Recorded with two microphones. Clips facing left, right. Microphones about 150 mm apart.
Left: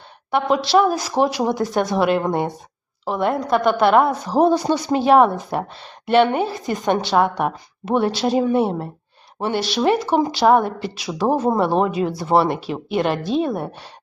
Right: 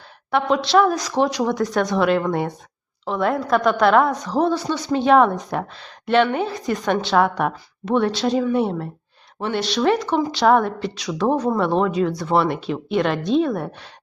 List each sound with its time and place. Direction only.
0.3 s a woman's voice: centre (ahead or behind)
1.4 s speech: 25° left (ahead or behind)
1.6 s a woman's voice: 5° left (ahead or behind)
9.6 s a woman's voice: 5° left (ahead or behind)